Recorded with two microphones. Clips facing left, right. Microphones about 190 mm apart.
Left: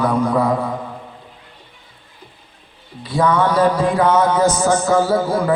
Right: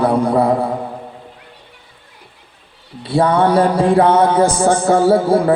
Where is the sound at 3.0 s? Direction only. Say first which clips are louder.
Right 3 dB; 30° right (ahead or behind).